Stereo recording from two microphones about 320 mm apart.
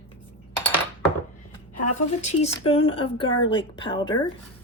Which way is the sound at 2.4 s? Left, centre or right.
Centre.